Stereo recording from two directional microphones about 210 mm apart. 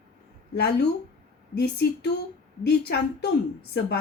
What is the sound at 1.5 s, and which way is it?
Speech, 50° left (ahead or behind).